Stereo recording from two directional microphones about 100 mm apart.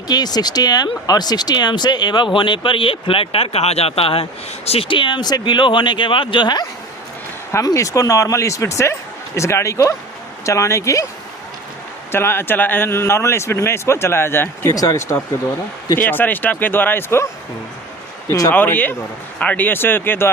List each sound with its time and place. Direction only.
0.1 s speech: 40° left (ahead or behind)
7.5 s speech: 35° left (ahead or behind)
12.1 s speech: 25° left (ahead or behind)
14.7 s speech: 40° left (ahead or behind)
16.0 s speech: 20° left (ahead or behind)
18.3 s speech: 35° left (ahead or behind)
18.5 s speech: 15° left (ahead or behind)